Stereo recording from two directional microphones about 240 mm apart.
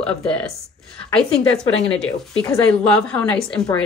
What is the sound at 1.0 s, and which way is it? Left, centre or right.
Speech, left.